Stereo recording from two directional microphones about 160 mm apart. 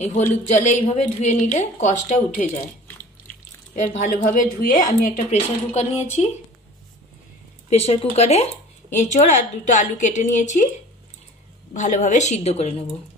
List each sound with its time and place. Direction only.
0.5 s speech: 50° left (ahead or behind)
3.7 s speech: 55° left (ahead or behind)
7.7 s speech: 40° left (ahead or behind)
11.7 s speech: 50° left (ahead or behind)